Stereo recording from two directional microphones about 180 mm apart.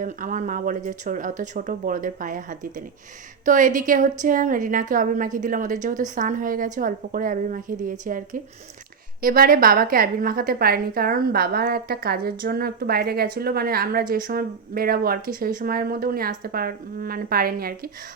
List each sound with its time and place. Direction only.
0.0 s a woman's voice: 45° right (ahead or behind)